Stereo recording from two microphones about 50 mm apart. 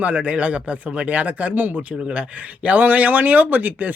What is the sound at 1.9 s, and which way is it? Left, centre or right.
Speech, right.